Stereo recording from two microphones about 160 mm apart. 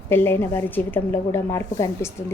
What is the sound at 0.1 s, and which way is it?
A woman's voice, 15° left (ahead or behind).